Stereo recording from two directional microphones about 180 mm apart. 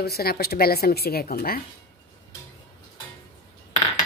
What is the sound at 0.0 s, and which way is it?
A woman's voice, 60° left (ahead or behind).